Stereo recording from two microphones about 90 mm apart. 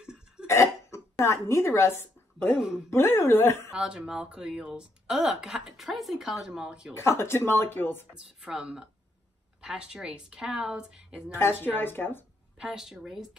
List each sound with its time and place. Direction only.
0.0 s cough: 10° right (ahead or behind)
0.5 s cough: 35° left (ahead or behind)
1.2 s a woman's voice: 30° left (ahead or behind)
3.7 s speech: 10° right (ahead or behind)
6.9 s speech: 30° left (ahead or behind)
8.1 s speech: 10° right (ahead or behind)
11.3 s speech: 25° left (ahead or behind)
12.5 s a woman's voice: 5° right (ahead or behind)